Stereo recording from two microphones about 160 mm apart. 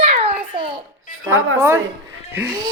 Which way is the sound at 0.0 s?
40° right (ahead or behind).